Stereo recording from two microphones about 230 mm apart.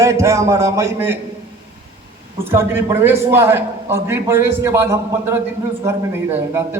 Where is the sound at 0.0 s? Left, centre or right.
Centre.